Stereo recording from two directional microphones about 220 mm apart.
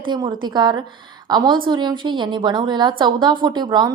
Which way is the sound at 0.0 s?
20° right (ahead or behind).